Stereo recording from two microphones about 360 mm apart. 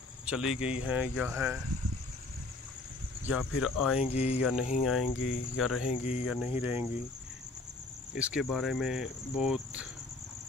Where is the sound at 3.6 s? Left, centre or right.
Centre.